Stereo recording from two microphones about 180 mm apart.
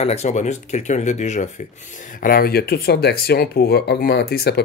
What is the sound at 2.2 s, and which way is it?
Speech, 55° left (ahead or behind).